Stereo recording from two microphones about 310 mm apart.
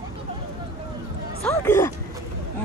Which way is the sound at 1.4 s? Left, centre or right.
Centre.